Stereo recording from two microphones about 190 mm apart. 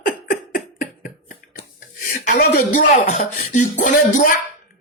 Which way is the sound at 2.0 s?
45° left (ahead or behind).